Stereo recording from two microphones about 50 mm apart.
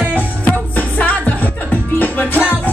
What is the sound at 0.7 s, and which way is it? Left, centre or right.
Music, left.